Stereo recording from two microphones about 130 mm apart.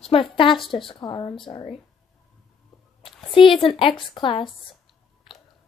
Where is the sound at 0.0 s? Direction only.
45° left (ahead or behind).